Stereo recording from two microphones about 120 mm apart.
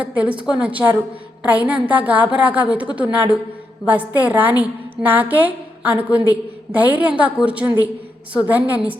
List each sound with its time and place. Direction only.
0.0 s a woman's voice: 10° right (ahead or behind)